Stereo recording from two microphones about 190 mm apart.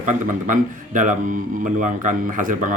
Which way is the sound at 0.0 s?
40° right (ahead or behind).